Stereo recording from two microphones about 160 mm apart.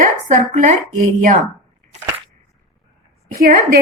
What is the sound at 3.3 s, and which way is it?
Speech, 60° right (ahead or behind).